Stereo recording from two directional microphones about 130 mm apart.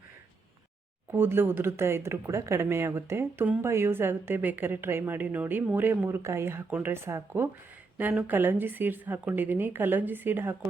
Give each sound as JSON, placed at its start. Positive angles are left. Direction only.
{"t": 1.1, "sound": "speech", "side_deg": -15}